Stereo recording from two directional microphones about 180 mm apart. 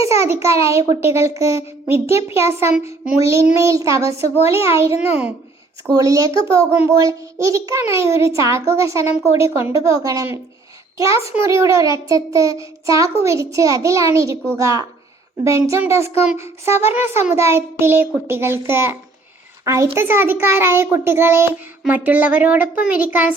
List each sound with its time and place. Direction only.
0.2 s a child's voice: 15° right (ahead or behind)